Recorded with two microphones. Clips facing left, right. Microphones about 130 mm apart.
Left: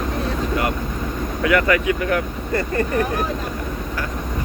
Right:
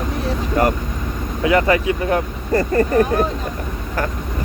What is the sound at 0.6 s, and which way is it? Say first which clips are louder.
Speech: right 7 dB; 40° right (ahead or behind).